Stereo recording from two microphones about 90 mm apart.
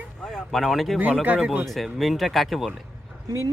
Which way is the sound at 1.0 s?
15° right (ahead or behind).